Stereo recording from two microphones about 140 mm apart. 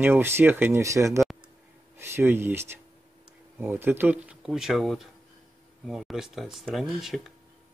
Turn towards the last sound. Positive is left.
turn(degrees=0)  # may be behind; listen again after turning